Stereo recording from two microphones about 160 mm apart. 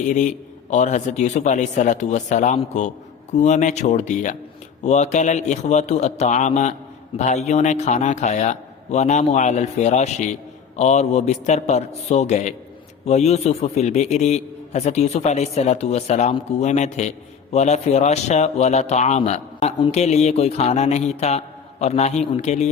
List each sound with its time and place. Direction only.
0.0 s a man's voice: 50° left (ahead or behind)